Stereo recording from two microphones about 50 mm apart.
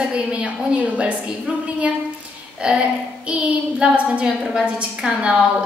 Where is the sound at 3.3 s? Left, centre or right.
Right.